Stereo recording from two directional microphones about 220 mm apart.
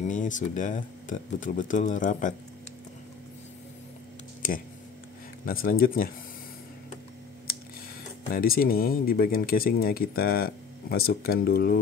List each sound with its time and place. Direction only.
0.0 s speech: 35° left (ahead or behind)
5.4 s speech: 40° left (ahead or behind)
8.3 s speech: 40° left (ahead or behind)